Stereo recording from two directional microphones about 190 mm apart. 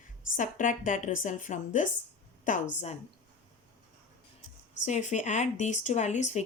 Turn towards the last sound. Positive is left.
turn(degrees=40)  # may be behind; listen again after turning